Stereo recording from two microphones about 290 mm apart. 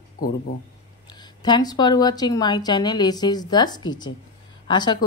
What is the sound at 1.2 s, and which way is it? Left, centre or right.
Speech, centre.